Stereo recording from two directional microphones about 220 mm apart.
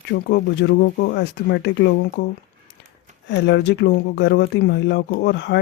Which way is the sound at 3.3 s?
55° left (ahead or behind).